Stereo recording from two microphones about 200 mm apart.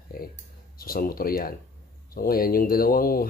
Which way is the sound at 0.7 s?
50° left (ahead or behind).